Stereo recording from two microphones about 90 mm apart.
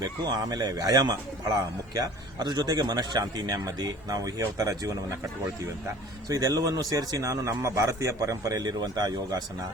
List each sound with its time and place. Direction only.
0.0 s speech: 45° right (ahead or behind)
6.2 s speech: 45° right (ahead or behind)